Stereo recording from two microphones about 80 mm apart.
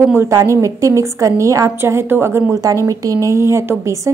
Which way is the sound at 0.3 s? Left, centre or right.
Right.